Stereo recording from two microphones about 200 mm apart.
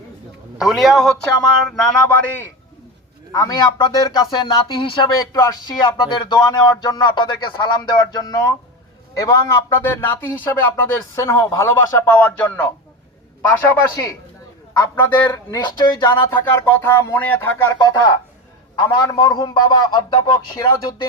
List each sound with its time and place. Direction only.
0.6 s a man's voice: centre (ahead or behind)
3.3 s speech: 20° left (ahead or behind)
18.8 s speech: 20° left (ahead or behind)